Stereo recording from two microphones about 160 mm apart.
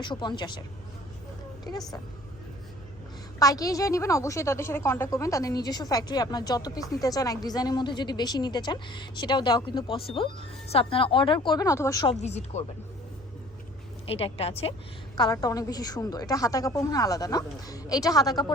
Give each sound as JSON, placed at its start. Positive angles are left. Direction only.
{"t": 0.0, "sound": "a woman's voice", "side_deg": 30}
{"t": 1.7, "sound": "a woman's voice", "side_deg": 25}
{"t": 3.3, "sound": "a woman's voice", "side_deg": 20}
{"t": 12.1, "sound": "speech", "side_deg": 45}
{"t": 14.1, "sound": "a woman's voice", "side_deg": 35}